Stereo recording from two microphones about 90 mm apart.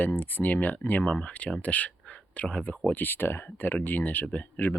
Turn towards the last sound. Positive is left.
turn(degrees=20)  # may be behind; listen again after turning